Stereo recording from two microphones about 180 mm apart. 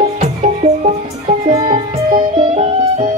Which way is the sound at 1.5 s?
25° right (ahead or behind).